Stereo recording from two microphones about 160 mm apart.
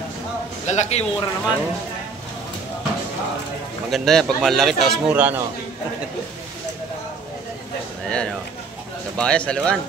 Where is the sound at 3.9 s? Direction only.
Centre (ahead or behind).